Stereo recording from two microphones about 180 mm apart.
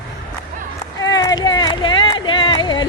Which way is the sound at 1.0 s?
20° left (ahead or behind).